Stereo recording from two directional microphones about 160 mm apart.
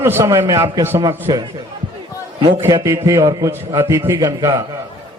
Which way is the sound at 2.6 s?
15° right (ahead or behind).